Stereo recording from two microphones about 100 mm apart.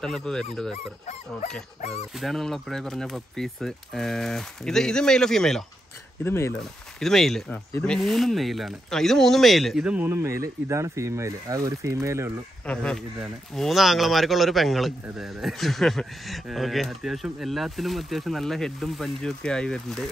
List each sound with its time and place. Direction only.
0.0 s speech: 5° left (ahead or behind)
2.1 s speech: centre (ahead or behind)
6.2 s speech: 25° left (ahead or behind)
7.0 s speech: 5° left (ahead or behind)
10.0 s speech: 25° right (ahead or behind)
12.6 s speech: 10° left (ahead or behind)